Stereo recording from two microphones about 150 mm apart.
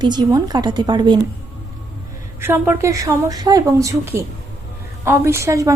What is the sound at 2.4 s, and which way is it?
A woman's voice, 15° right (ahead or behind).